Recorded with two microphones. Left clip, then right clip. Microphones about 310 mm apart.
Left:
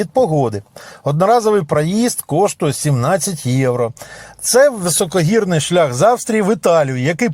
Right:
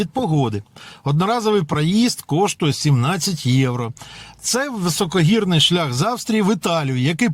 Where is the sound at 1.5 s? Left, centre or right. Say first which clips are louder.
Left 4 dB; centre.